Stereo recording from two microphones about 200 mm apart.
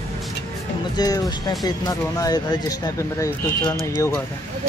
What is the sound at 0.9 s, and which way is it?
Speech, 20° left (ahead or behind).